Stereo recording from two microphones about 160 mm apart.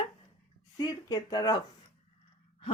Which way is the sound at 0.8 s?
25° left (ahead or behind).